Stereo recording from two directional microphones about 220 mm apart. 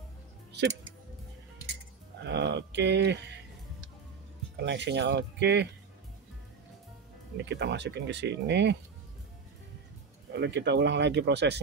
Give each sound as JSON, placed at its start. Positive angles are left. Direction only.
{"t": 2.2, "sound": "a sound", "side_deg": -50}
{"t": 4.6, "sound": "speech", "side_deg": -50}
{"t": 7.3, "sound": "speech", "side_deg": -50}
{"t": 10.3, "sound": "speech", "side_deg": -50}